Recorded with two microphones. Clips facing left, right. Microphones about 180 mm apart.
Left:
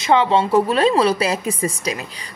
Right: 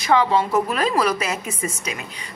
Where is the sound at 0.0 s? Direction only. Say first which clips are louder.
Left 2 dB; 25° left (ahead or behind).